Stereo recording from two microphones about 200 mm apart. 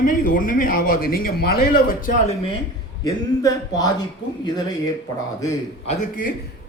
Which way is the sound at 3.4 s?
20° left (ahead or behind).